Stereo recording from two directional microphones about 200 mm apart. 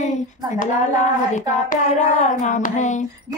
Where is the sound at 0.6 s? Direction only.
40° left (ahead or behind).